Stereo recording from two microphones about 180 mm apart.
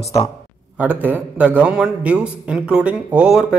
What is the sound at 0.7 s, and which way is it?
A man's voice, 10° right (ahead or behind).